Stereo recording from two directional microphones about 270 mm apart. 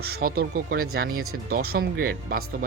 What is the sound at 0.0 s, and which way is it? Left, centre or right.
Speech, right.